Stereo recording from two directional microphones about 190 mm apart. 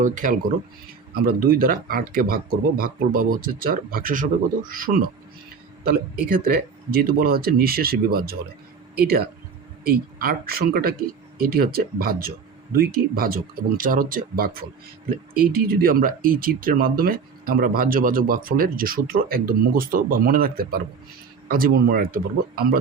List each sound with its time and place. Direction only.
0.0 s speech: 45° right (ahead or behind)